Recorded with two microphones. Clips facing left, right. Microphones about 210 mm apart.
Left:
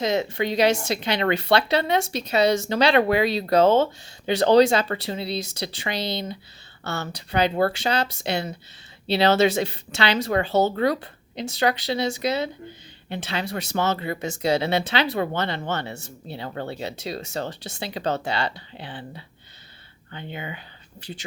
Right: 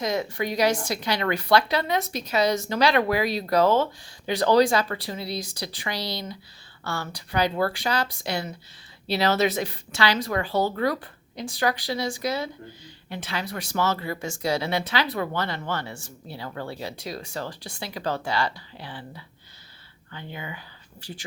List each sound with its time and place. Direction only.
0.0 s speech: 25° left (ahead or behind)